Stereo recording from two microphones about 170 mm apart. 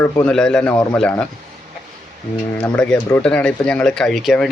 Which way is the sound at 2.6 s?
5° left (ahead or behind).